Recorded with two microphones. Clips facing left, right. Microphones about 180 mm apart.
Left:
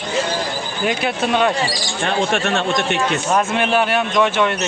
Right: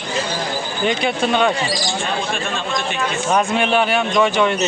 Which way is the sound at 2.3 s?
70° left (ahead or behind).